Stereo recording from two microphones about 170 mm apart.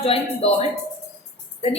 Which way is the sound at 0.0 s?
35° left (ahead or behind).